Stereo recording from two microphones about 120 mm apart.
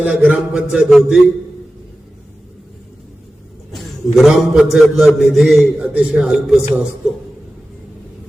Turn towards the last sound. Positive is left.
turn(degrees=-5)  # may be behind; listen again after turning